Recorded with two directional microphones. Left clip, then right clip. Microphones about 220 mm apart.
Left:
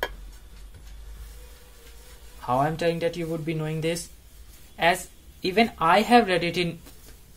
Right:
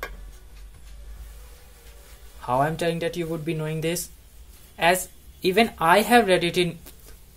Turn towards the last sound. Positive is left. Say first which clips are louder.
# right 3 dB
turn(degrees=-15)  # may be behind; listen again after turning